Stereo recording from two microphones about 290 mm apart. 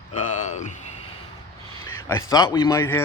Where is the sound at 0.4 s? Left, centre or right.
Left.